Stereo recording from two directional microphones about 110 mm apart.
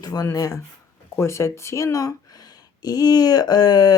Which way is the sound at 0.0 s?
35° left (ahead or behind).